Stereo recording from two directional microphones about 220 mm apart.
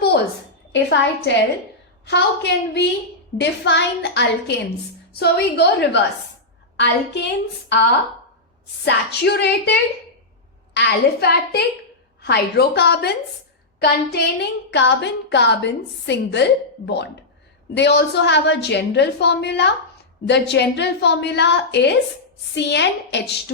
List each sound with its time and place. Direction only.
0.7 s a woman's voice: 50° left (ahead or behind)
8.8 s a woman's voice: 50° left (ahead or behind)